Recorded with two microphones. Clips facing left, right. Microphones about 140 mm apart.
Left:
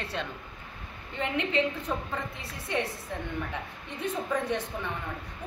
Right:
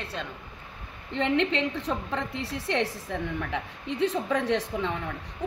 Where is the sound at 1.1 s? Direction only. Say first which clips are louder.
Right 5 dB; 85° right.